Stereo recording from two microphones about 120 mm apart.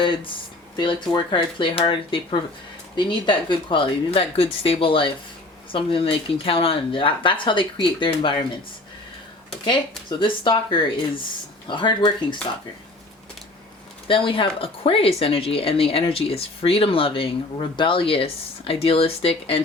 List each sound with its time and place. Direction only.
0.0 s speech: 45° left (ahead or behind)
10.1 s speech: 40° left (ahead or behind)
14.1 s speech: 45° left (ahead or behind)